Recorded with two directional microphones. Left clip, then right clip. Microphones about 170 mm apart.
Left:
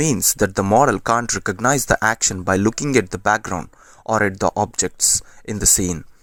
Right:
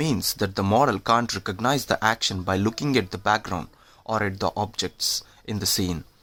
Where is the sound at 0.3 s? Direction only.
40° left (ahead or behind).